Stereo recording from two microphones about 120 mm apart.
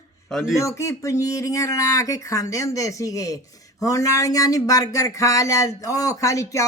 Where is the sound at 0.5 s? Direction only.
25° left (ahead or behind).